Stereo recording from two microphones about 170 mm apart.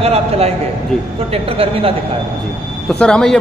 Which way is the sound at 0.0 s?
35° right (ahead or behind).